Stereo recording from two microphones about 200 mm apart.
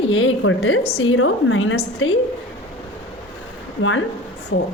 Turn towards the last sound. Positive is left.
turn(degrees=80)